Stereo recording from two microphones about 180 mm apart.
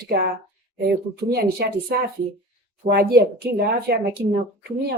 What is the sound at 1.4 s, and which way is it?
Speech, 60° right (ahead or behind).